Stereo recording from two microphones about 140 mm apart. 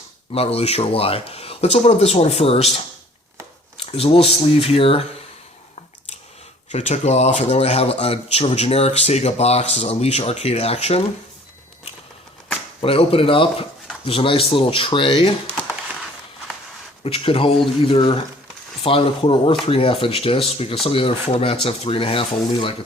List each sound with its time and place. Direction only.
0.3 s speech: 45° left (ahead or behind)
3.9 s speech: 45° left (ahead or behind)
6.7 s speech: 55° left (ahead or behind)
12.8 s speech: 40° left (ahead or behind)
17.0 s speech: 45° left (ahead or behind)